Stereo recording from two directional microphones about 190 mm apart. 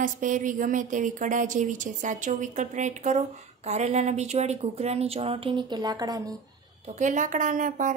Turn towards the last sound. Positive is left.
turn(degrees=-45)  # may be behind; listen again after turning